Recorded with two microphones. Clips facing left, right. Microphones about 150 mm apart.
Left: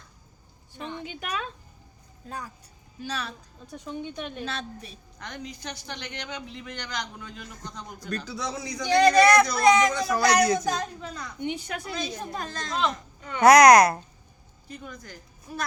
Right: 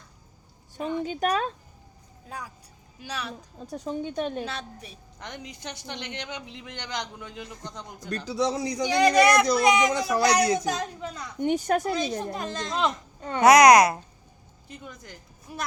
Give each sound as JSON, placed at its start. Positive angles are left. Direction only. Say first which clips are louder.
{"t": 1.0, "sound": "speech", "louder": "right 9 dB", "side_deg": -40}
{"t": 3.0, "sound": "a man's voice", "louder": "left 1 dB", "side_deg": -15}
{"t": 3.6, "sound": "speech", "louder": "right 4 dB", "side_deg": -40}
{"t": 4.4, "sound": "a woman's voice", "louder": "left 1 dB", "side_deg": -15}
{"t": 8.8, "sound": "a man's voice", "louder": "left 2 dB", "side_deg": -15}
{"t": 11.3, "sound": "a woman's voice", "louder": "right 9 dB", "side_deg": -45}
{"t": 12.2, "sound": "a woman's voice", "louder": "right 3 dB", "side_deg": -20}
{"t": 13.4, "sound": "a child's voice", "louder": "even", "side_deg": 0}
{"t": 14.7, "sound": "a woman's voice", "louder": "left 2 dB", "side_deg": -25}